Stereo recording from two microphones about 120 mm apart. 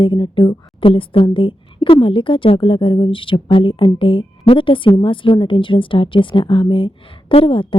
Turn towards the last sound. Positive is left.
turn(degrees=45)  # may be behind; listen again after turning